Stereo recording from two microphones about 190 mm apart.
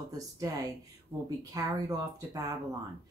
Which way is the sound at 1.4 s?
20° right (ahead or behind).